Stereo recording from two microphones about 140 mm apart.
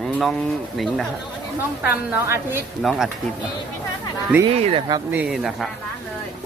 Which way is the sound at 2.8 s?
Centre (ahead or behind).